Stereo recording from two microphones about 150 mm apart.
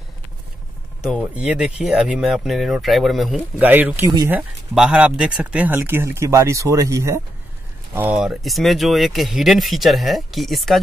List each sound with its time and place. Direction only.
1.0 s speech: 5° right (ahead or behind)
3.3 s speech: 10° right (ahead or behind)
7.9 s speech: 10° right (ahead or behind)